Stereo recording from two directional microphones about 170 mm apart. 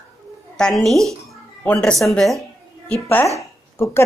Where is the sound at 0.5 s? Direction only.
5° left (ahead or behind).